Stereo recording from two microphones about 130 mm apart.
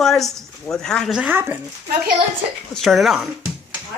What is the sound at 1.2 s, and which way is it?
Speech, 15° right (ahead or behind).